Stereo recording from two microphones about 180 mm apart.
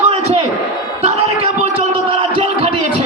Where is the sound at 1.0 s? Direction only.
40° right (ahead or behind).